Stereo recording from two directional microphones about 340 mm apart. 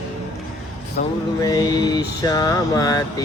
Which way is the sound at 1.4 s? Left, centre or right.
Centre.